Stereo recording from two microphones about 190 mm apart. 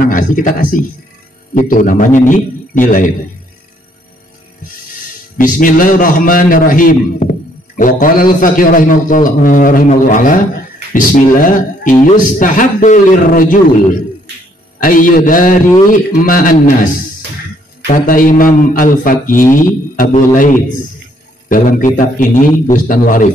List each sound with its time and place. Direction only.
0.0 s a man's voice: 45° left (ahead or behind)
5.4 s a man's voice: 45° left (ahead or behind)
14.8 s a man's voice: 45° left (ahead or behind)